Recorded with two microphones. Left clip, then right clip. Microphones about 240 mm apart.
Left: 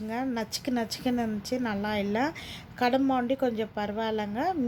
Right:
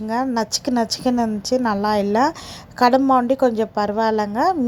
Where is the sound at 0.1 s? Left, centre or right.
Right.